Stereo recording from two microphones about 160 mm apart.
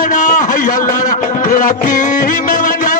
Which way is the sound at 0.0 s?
55° left (ahead or behind).